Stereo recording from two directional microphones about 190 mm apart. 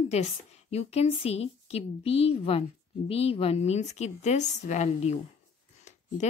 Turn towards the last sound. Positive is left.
turn(degrees=40)  # may be behind; listen again after turning